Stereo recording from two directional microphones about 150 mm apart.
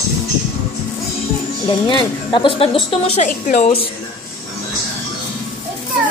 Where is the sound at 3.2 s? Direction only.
55° left (ahead or behind).